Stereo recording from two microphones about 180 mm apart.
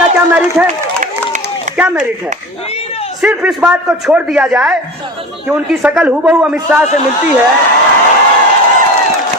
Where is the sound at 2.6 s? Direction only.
35° left (ahead or behind).